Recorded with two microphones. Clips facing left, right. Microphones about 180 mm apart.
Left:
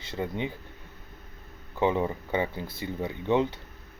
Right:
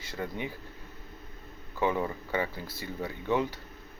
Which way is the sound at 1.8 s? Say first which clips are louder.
Left 3 dB; 20° left (ahead or behind).